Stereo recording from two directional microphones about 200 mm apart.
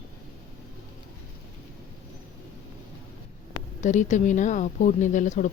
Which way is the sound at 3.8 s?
35° left (ahead or behind).